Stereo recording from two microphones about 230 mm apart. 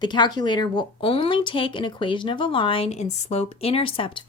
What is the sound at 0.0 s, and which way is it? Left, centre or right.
A woman's voice, centre.